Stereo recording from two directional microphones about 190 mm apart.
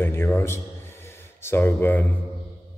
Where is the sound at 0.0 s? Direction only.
10° left (ahead or behind).